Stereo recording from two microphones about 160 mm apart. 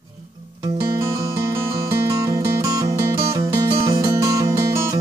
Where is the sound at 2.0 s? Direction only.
20° right (ahead or behind).